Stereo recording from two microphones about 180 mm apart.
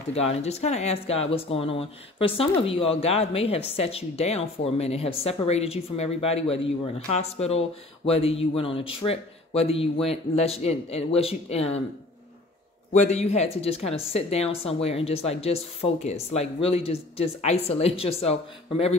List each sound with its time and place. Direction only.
0.1 s speech: 35° left (ahead or behind)
12.9 s speech: 40° left (ahead or behind)